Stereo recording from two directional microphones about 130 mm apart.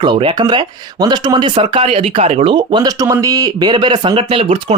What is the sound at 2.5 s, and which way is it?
Speech, 40° right (ahead or behind).